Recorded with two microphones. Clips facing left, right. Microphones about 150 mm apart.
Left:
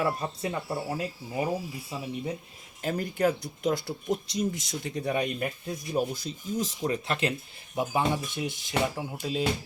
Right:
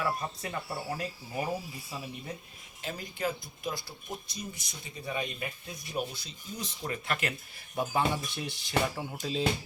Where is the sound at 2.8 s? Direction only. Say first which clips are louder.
Left 8 dB; 50° left (ahead or behind).